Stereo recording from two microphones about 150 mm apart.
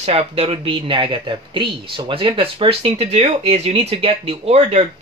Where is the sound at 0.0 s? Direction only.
40° right (ahead or behind).